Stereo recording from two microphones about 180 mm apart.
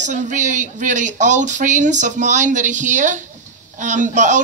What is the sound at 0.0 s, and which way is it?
A woman's voice, 45° right (ahead or behind).